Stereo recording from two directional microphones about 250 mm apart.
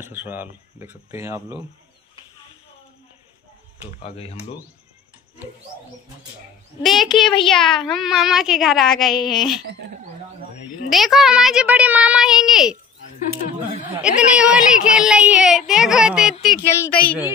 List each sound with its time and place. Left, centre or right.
0.0 s speech: centre
3.8 s speech: left
6.8 s a woman's voice: centre
10.9 s a woman's voice: centre
13.9 s a woman's voice: centre
16.6 s a woman's voice: centre